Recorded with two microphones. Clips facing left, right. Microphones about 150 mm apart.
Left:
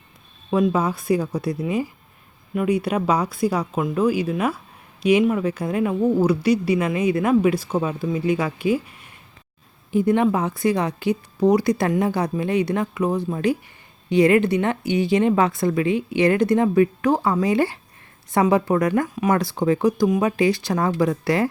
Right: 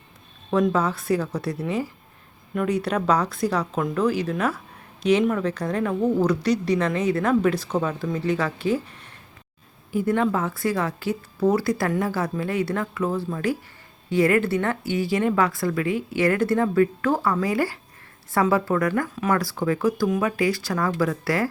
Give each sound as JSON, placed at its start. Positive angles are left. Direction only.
{"t": 0.5, "sound": "a woman's voice", "side_deg": 10}